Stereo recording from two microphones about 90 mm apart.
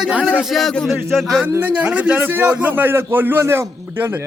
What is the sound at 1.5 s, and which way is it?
A man's voice, 20° right (ahead or behind).